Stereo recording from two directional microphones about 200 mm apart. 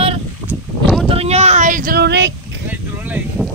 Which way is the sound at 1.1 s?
30° right (ahead or behind).